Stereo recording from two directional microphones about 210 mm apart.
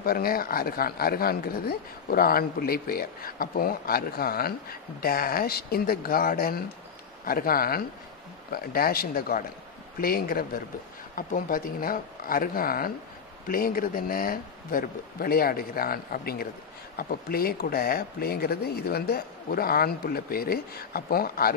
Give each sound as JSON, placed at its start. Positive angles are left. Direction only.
{"t": 0.0, "sound": "speech", "side_deg": 45}